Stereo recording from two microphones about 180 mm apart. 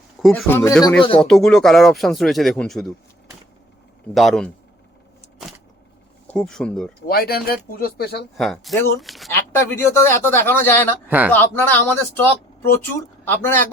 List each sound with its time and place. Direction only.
0.4 s speech: 15° left (ahead or behind)
1.2 s speech: 5° left (ahead or behind)
4.1 s speech: centre (ahead or behind)
6.2 s speech: 5° left (ahead or behind)
7.1 s speech: 60° left (ahead or behind)
8.4 s speech: centre (ahead or behind)
9.3 s speech: 15° left (ahead or behind)